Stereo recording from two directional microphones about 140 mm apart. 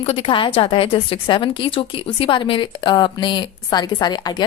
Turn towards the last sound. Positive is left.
turn(degrees=30)  # may be behind; listen again after turning